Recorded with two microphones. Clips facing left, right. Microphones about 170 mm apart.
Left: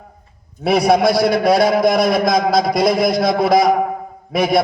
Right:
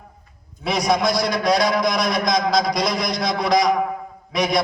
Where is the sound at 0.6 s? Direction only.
55° left (ahead or behind).